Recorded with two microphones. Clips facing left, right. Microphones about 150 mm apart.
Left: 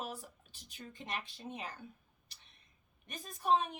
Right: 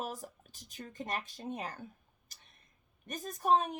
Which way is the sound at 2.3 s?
45° right (ahead or behind).